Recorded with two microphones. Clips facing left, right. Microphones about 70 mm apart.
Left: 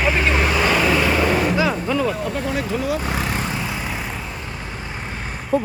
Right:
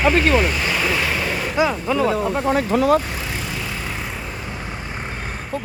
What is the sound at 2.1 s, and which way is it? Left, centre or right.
Speech, right.